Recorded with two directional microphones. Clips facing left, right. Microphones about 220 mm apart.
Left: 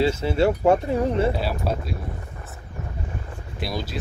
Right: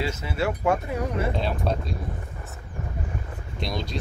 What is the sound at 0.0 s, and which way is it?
Speech, 30° left (ahead or behind).